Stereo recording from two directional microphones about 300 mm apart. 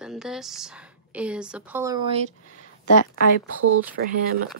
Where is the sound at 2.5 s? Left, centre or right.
Left.